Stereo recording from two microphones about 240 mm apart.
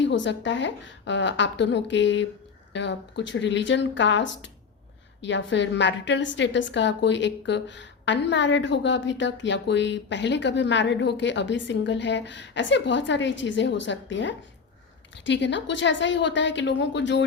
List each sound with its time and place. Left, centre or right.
0.0 s a woman's voice: left